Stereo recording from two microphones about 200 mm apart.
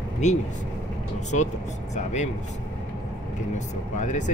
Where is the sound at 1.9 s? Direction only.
35° left (ahead or behind).